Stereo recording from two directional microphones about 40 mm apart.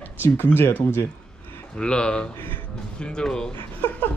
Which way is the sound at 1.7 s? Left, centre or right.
Left.